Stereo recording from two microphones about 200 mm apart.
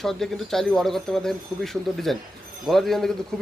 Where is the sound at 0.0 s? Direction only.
Centre (ahead or behind).